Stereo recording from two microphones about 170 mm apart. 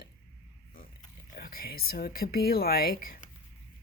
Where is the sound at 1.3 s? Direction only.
65° left (ahead or behind).